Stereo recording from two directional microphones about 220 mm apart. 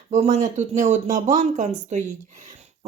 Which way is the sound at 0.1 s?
30° right (ahead or behind).